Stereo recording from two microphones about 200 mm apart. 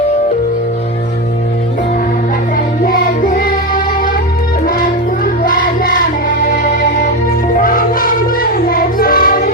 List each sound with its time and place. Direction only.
2.6 s music: 45° left (ahead or behind)
4.6 s music: 45° left (ahead or behind)
7.5 s child singing: 45° left (ahead or behind)